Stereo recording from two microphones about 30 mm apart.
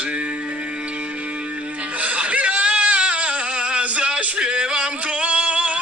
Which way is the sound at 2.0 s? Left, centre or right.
Right.